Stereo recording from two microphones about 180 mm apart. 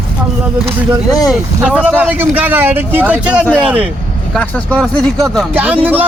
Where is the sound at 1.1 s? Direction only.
20° left (ahead or behind).